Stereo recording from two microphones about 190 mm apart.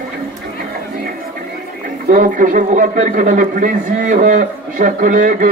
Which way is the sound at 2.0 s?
45° right (ahead or behind).